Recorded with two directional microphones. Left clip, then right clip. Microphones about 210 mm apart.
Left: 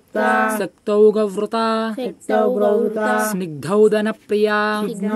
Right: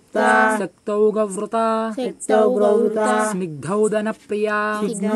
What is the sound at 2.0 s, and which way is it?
Speech, 15° right (ahead or behind).